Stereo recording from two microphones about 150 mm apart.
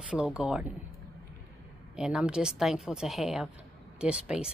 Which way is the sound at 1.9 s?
5° right (ahead or behind).